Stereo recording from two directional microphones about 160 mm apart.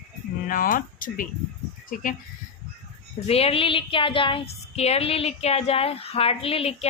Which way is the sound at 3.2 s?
40° left (ahead or behind).